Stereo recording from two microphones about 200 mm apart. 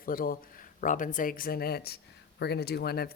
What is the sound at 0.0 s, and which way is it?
Speech, 45° left (ahead or behind).